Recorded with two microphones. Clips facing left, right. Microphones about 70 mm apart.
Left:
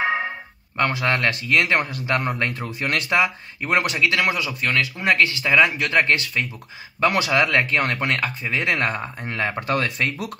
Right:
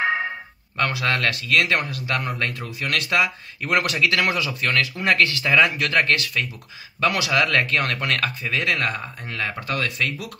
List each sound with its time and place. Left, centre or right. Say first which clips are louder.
0.0 s music: even; centre
0.7 s speech: left 2 dB; left